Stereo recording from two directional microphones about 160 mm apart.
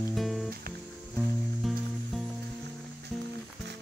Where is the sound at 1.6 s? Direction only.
Centre (ahead or behind).